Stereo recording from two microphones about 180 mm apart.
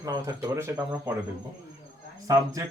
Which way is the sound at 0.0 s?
20° right (ahead or behind).